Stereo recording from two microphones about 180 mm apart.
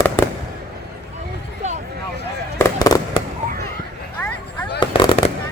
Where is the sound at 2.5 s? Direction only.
15° left (ahead or behind).